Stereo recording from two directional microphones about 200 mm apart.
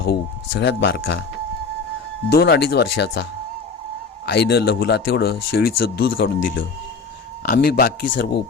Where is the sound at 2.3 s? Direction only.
50° left (ahead or behind).